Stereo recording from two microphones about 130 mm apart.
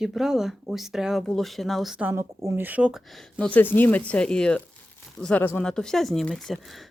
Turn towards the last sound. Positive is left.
turn(degrees=0)  # may be behind; listen again after turning